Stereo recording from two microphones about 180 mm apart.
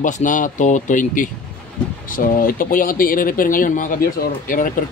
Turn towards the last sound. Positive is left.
turn(degrees=50)  # may be behind; listen again after turning